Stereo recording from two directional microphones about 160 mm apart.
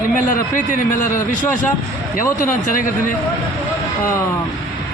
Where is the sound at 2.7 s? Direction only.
55° left (ahead or behind).